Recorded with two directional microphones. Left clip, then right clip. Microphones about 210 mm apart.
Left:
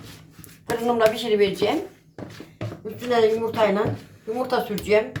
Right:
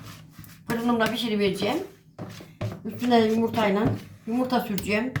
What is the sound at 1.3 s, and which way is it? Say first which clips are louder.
Speech: left 5 dB; 25° left (ahead or behind).